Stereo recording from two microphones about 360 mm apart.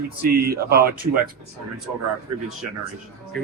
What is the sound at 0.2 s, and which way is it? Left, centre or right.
Speech, right.